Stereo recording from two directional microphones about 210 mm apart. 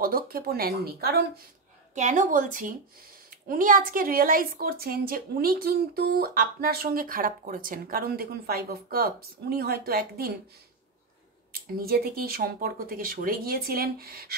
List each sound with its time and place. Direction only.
0.0 s a woman's voice: 45° right (ahead or behind)
2.0 s a woman's voice: 35° right (ahead or behind)
11.8 s a woman's voice: 45° right (ahead or behind)